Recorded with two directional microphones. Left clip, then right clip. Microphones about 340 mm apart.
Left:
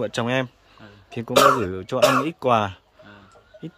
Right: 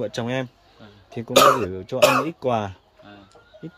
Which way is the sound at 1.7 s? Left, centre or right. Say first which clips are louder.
Right 1 dB; centre.